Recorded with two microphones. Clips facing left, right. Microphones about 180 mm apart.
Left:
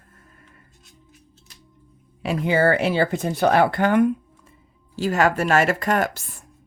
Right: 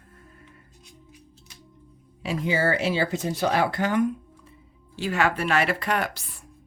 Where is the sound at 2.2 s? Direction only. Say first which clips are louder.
Left 5 dB; 60° left (ahead or behind).